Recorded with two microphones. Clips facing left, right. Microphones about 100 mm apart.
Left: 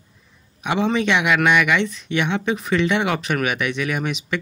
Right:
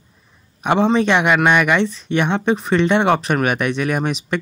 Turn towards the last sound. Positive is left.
turn(degrees=-40)  # may be behind; listen again after turning